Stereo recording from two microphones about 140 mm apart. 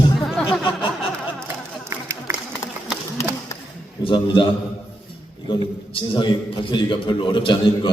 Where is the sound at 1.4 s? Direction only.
20° right (ahead or behind).